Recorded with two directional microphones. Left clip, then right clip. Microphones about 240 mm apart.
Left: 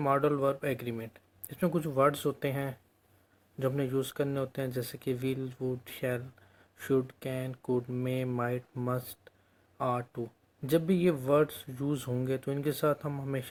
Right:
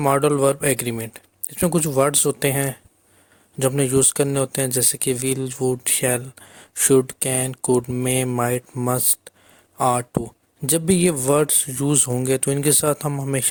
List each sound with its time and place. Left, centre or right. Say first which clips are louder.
0.0 s speech: right 10 dB; right